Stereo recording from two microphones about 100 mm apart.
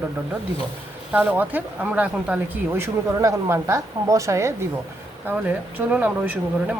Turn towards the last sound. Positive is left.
turn(degrees=-15)  # may be behind; listen again after turning